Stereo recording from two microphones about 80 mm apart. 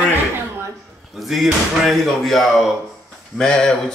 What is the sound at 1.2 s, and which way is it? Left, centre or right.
Speech, centre.